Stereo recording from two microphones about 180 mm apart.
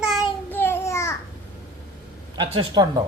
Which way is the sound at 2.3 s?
25° right (ahead or behind).